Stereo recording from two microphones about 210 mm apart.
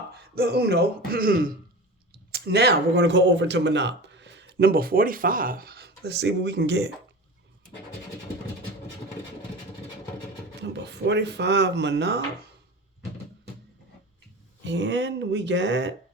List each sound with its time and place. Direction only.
0.1 s speech: 50° right (ahead or behind)
10.6 s speech: 55° right (ahead or behind)
14.6 s speech: 60° right (ahead or behind)